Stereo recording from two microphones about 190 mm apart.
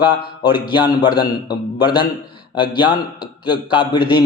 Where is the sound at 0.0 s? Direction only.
25° left (ahead or behind).